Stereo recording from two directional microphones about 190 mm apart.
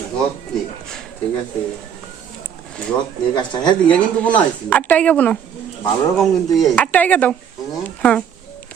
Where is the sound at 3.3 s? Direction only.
20° left (ahead or behind).